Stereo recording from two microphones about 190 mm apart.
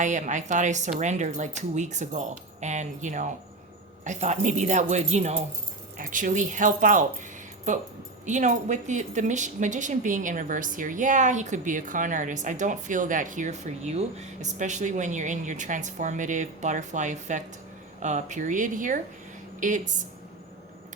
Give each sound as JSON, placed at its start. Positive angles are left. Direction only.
{"t": 0.0, "sound": "speech", "side_deg": -40}
{"t": 8.3, "sound": "speech", "side_deg": -40}